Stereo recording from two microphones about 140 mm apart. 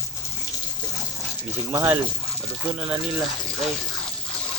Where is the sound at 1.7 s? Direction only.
20° right (ahead or behind).